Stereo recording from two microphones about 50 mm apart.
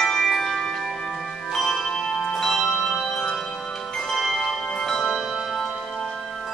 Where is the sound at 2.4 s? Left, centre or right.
Centre.